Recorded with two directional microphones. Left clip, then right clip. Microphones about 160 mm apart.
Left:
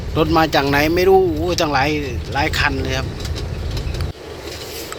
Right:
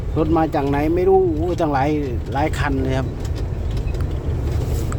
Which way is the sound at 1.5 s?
20° right (ahead or behind).